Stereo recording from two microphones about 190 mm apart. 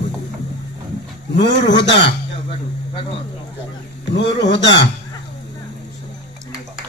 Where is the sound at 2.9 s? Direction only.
30° left (ahead or behind).